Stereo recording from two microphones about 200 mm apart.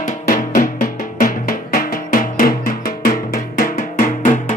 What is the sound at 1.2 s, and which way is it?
Music, 45° left (ahead or behind).